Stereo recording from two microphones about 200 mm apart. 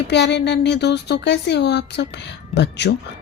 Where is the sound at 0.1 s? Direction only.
60° left (ahead or behind).